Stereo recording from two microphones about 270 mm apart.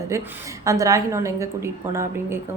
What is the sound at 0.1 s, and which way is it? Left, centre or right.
A woman's voice, centre.